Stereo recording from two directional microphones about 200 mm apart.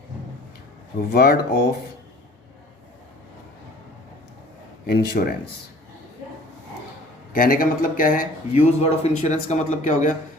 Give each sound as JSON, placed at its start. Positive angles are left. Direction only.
{"t": 1.1, "sound": "speech", "side_deg": 55}
{"t": 4.9, "sound": "speech", "side_deg": 55}
{"t": 7.3, "sound": "speech", "side_deg": 45}